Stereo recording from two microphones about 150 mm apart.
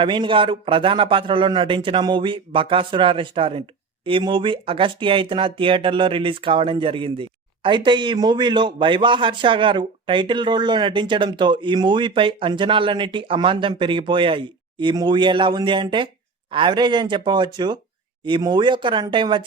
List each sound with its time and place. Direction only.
0.0 s speech: 35° right (ahead or behind)